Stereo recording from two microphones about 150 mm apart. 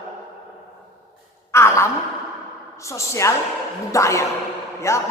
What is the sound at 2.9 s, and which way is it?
A woman's voice, 20° left (ahead or behind).